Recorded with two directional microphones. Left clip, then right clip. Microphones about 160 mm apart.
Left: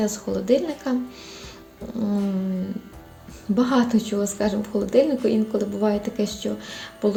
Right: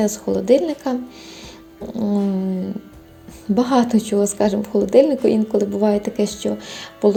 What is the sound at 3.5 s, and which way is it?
Speech, 30° right (ahead or behind).